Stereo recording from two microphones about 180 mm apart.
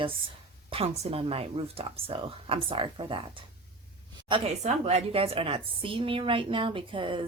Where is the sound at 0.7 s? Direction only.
30° right (ahead or behind).